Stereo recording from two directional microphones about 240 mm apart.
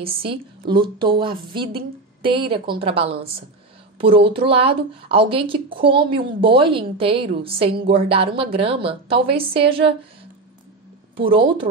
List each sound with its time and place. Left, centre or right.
0.7 s a woman's voice: centre
11.1 s a woman's voice: right